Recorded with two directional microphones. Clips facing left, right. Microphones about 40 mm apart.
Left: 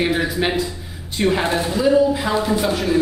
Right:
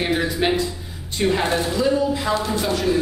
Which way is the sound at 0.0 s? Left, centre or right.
Centre.